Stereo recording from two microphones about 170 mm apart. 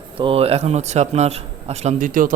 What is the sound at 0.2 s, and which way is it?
A man's voice, 35° right (ahead or behind).